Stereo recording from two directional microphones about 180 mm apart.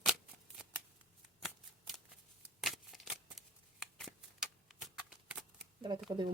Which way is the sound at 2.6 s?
Centre (ahead or behind).